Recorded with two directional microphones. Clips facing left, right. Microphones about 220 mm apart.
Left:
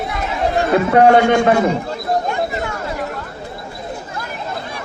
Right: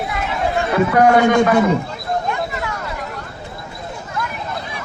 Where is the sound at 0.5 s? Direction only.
30° left (ahead or behind).